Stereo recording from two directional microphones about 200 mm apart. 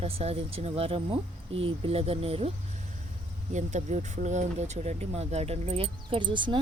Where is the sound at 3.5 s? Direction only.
35° right (ahead or behind).